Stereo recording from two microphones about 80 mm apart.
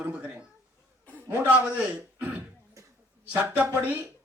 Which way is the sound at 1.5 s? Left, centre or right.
Centre.